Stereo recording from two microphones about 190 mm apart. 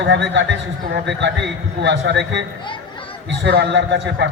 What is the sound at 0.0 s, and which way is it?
A man's voice, 70° right (ahead or behind).